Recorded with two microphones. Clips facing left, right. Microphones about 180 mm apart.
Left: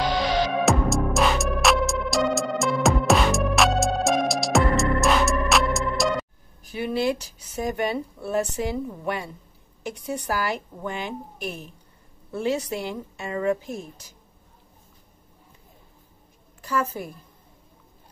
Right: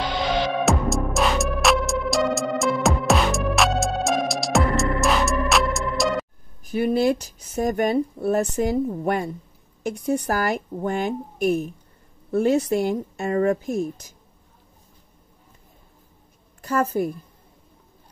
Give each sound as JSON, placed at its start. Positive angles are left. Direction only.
{"t": 0.7, "sound": "music", "side_deg": 0}
{"t": 6.6, "sound": "speech", "side_deg": -50}
{"t": 16.6, "sound": "speech", "side_deg": -45}